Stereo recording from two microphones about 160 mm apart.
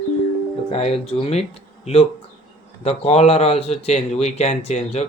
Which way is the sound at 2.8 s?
40° left (ahead or behind).